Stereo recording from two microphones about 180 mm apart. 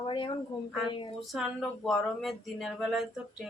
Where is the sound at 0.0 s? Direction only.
25° left (ahead or behind).